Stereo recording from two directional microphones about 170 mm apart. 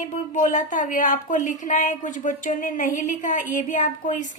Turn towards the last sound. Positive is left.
turn(degrees=50)  # may be behind; listen again after turning